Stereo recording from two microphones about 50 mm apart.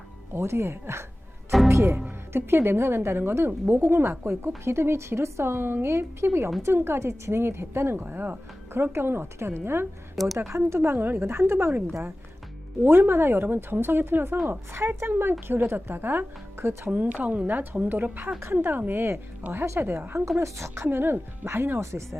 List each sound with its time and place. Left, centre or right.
0.3 s a woman's voice: right
1.7 s a woman's voice: right
2.0 s a woman's voice: right
8.0 s speech: right
10.2 s speech: centre
10.7 s a woman's voice: right
10.9 s speech: right
12.8 s speech: right
16.9 s a woman's voice: right
19.5 s a woman's voice: right
20.8 s a woman's voice: right